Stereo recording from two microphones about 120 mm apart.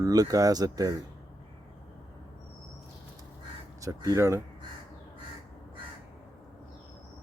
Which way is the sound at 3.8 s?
30° right (ahead or behind).